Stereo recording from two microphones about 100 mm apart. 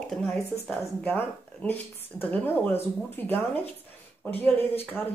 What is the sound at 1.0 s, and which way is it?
Speech, 20° left (ahead or behind).